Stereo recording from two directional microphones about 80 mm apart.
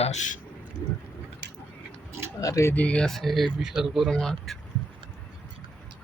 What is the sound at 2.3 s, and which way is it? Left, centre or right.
Speech, left.